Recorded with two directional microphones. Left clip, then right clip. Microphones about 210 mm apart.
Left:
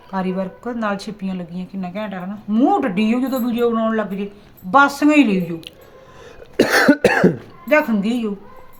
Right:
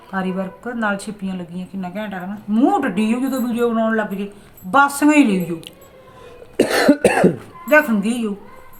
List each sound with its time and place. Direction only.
0.1 s speech: 15° left (ahead or behind)
6.6 s cough: 20° left (ahead or behind)
7.7 s speech: 5° left (ahead or behind)